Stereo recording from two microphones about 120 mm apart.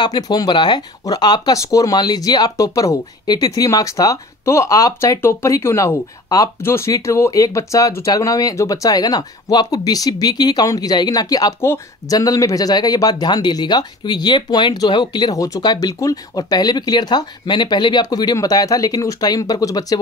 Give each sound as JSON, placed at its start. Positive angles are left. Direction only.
{"t": 0.0, "sound": "speech", "side_deg": 35}